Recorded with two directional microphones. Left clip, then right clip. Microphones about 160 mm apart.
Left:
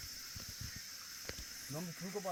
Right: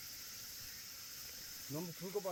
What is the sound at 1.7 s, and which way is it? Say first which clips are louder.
Speech: right 2 dB; 5° left (ahead or behind).